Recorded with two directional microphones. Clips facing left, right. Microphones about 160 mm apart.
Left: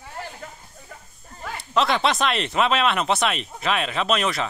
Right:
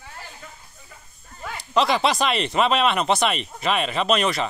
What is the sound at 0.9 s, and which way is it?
Speech, 50° left (ahead or behind).